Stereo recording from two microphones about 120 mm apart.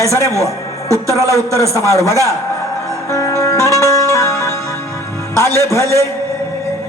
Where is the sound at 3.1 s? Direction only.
25° left (ahead or behind).